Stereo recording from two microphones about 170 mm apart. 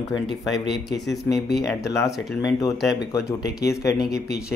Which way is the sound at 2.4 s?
20° left (ahead or behind).